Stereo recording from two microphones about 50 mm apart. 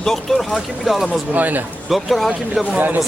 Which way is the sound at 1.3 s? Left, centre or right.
Right.